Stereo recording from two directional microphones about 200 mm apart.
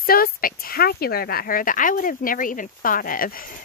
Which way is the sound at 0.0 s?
45° left (ahead or behind).